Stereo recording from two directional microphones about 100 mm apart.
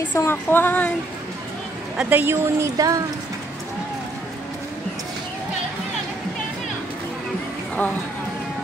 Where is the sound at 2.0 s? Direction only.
20° right (ahead or behind).